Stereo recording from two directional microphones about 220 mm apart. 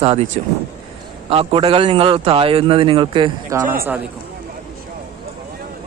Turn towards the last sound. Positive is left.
turn(degrees=-10)  # may be behind; listen again after turning